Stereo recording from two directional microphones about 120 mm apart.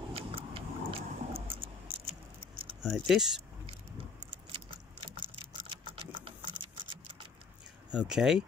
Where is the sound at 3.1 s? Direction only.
5° right (ahead or behind).